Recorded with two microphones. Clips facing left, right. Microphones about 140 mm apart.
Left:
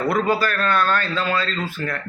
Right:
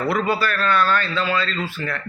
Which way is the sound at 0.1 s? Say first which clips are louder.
Left 2 dB; 45° left (ahead or behind).